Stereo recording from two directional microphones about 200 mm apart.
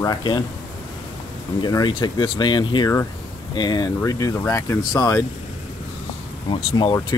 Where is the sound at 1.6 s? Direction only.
20° left (ahead or behind).